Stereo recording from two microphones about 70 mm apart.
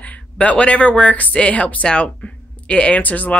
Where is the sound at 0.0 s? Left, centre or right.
Centre.